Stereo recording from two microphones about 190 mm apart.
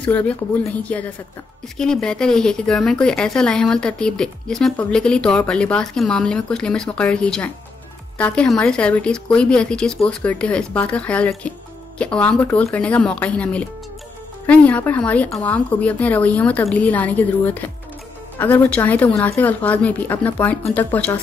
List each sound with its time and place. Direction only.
0.0 s speech: 10° left (ahead or behind)